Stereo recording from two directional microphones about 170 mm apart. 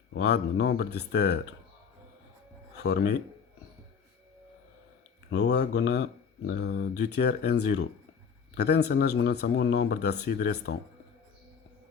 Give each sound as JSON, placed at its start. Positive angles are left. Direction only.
{"t": 0.1, "sound": "speech", "side_deg": 80}
{"t": 2.7, "sound": "speech", "side_deg": 80}
{"t": 5.3, "sound": "speech", "side_deg": 85}
{"t": 8.5, "sound": "speech", "side_deg": 75}